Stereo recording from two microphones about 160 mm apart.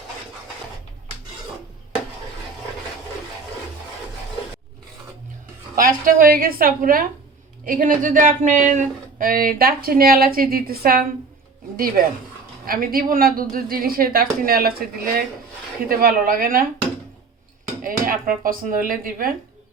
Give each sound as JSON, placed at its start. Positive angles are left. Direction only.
{"t": 5.7, "sound": "speech", "side_deg": -60}
{"t": 12.6, "sound": "speech", "side_deg": -65}
{"t": 17.8, "sound": "speech", "side_deg": -60}